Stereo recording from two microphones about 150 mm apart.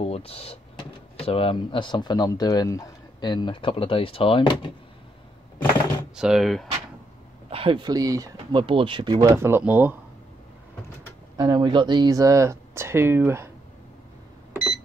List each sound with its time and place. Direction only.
0.0 s speech: 40° left (ahead or behind)
6.1 s speech: 5° right (ahead or behind)
7.4 s speech: 35° right (ahead or behind)
9.3 s speech: 15° right (ahead or behind)
11.3 s speech: 25° right (ahead or behind)